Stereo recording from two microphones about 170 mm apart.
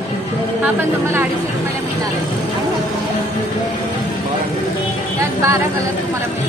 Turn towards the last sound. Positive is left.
turn(degrees=-20)  # may be behind; listen again after turning